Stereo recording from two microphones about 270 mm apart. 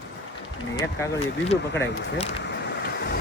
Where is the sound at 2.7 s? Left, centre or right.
Left.